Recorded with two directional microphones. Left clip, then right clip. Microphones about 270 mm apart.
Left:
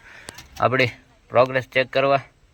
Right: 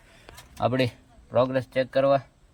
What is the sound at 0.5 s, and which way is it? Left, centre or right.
Speech, left.